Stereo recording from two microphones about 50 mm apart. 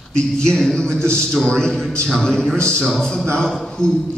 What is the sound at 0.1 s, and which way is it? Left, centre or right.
Speech, centre.